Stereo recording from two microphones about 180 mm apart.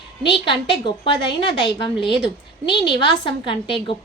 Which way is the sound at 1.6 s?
25° left (ahead or behind).